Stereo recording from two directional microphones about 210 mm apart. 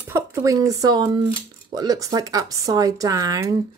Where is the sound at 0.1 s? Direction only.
15° right (ahead or behind).